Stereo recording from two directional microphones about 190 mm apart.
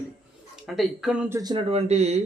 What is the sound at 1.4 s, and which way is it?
Speech, 25° right (ahead or behind).